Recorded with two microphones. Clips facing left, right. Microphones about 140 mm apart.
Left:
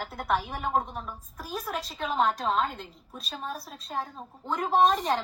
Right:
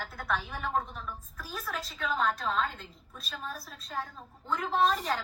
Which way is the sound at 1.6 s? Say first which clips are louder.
Left 1 dB; 25° left (ahead or behind).